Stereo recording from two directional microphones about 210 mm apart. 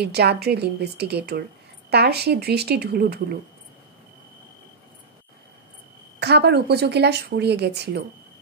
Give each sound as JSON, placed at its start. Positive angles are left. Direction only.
{"t": 0.0, "sound": "speech", "side_deg": -50}
{"t": 6.1, "sound": "speech", "side_deg": -50}